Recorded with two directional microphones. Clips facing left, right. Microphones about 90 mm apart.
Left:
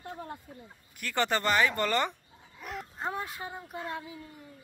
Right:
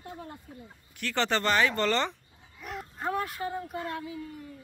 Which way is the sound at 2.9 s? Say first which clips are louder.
Right 5 dB; 20° left (ahead or behind).